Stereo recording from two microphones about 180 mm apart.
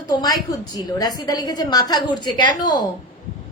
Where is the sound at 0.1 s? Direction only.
20° left (ahead or behind).